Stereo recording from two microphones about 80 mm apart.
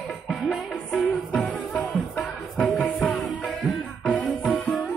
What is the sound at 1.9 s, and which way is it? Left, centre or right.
Music, centre.